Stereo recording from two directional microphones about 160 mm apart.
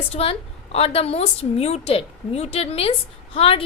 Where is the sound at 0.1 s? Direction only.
40° left (ahead or behind).